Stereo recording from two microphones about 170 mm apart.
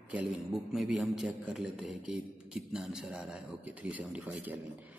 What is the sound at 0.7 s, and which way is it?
A man's voice, centre (ahead or behind).